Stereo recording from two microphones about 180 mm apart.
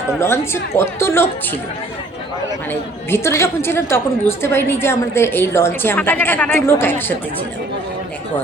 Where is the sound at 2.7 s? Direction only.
15° left (ahead or behind).